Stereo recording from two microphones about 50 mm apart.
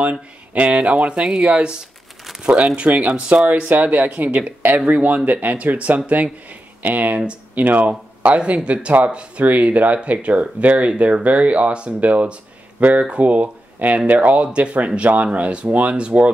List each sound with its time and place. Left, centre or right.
0.0 s speech: right
7.2 s speech: right